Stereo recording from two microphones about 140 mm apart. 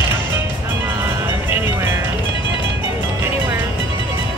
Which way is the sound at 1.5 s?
15° right (ahead or behind).